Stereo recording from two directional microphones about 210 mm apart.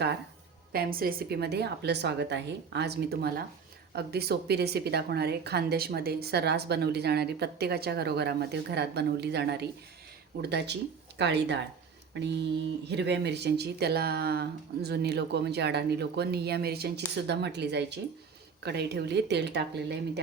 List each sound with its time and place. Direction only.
0.7 s a woman's voice: 45° right (ahead or behind)